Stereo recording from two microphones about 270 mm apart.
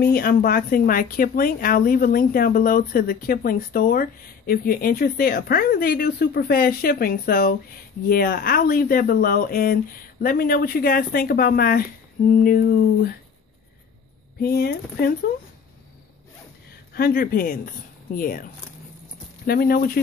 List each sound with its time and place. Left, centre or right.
0.0 s speech: left
14.4 s speech: left
16.9 s speech: left